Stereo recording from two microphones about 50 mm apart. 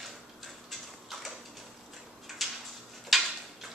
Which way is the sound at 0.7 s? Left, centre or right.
Centre.